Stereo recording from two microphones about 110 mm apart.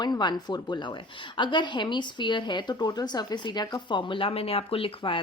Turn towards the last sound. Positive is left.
turn(degrees=55)  # may be behind; listen again after turning